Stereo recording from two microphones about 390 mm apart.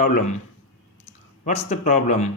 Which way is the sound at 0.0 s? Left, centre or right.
Left.